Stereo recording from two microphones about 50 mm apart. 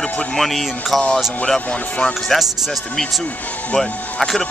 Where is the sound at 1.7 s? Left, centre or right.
Left.